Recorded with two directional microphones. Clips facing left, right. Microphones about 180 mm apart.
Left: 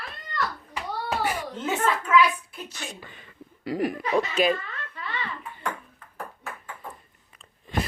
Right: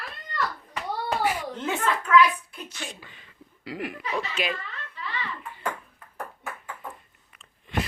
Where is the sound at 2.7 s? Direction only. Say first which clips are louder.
Even; 50° left (ahead or behind).